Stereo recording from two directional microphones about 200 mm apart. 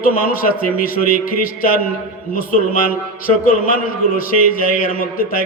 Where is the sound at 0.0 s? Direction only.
45° left (ahead or behind).